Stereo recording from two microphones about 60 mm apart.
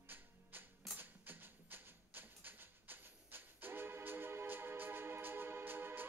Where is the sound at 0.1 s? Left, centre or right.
Right.